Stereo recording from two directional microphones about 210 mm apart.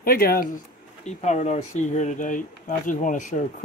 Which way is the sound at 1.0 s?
35° left (ahead or behind).